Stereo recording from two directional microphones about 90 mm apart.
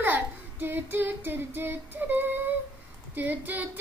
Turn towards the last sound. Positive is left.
turn(degrees=-20)  # may be behind; listen again after turning